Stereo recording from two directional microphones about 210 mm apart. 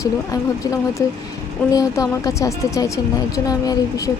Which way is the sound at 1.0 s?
15° left (ahead or behind).